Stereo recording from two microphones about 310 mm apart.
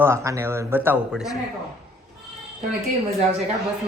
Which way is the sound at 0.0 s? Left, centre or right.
Centre.